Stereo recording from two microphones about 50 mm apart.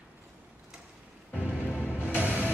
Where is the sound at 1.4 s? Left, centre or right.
Right.